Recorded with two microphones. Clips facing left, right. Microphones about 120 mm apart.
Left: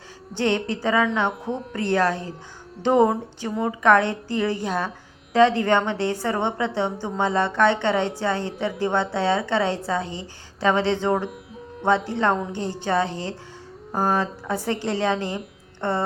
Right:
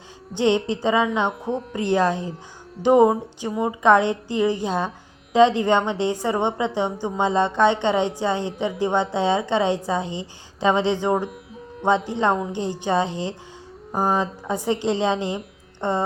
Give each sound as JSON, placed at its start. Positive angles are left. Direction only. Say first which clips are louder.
{"t": 0.3, "sound": "a woman's voice", "louder": "right 3 dB", "side_deg": -20}